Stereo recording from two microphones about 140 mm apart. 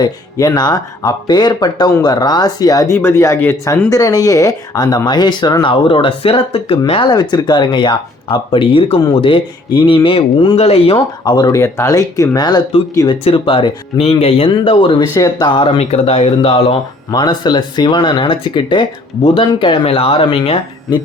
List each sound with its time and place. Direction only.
0.0 s speech: 25° left (ahead or behind); by 11.0 s 45° left (ahead or behind)
11.3 s speech: 30° left (ahead or behind)
13.2 s speech: 40° left (ahead or behind)
15.1 s speech: 25° left (ahead or behind)
15.8 s speech: 45° left (ahead or behind)
17.1 s speech: 30° left (ahead or behind)